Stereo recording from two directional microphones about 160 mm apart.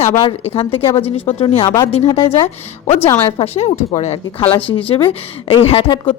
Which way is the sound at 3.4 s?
40° left (ahead or behind).